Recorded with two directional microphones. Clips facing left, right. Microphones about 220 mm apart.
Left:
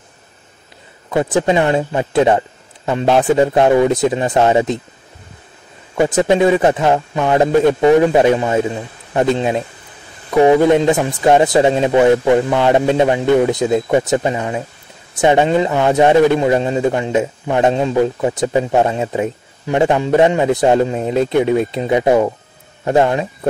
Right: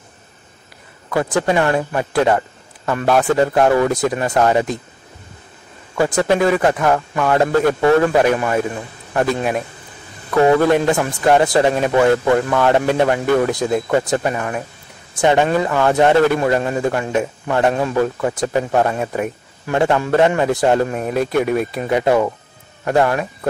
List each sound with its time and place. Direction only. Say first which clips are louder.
1.1 s a man's voice: left 2 dB; 20° left (ahead or behind)
5.9 s a man's voice: left 3 dB; 20° left (ahead or behind)